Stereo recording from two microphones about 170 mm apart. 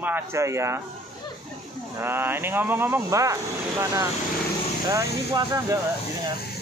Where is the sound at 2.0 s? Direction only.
15° right (ahead or behind).